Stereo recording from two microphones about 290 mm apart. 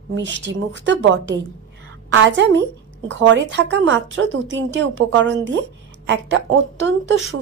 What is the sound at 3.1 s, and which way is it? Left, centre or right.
A woman's voice, right.